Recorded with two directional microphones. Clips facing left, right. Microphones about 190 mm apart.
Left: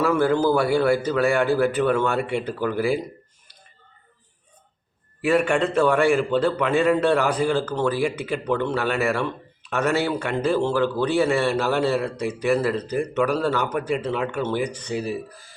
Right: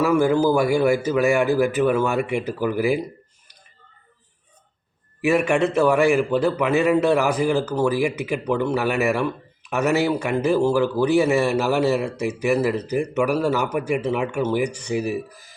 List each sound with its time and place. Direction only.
0.0 s a man's voice: 10° right (ahead or behind)
5.2 s a man's voice: 10° right (ahead or behind)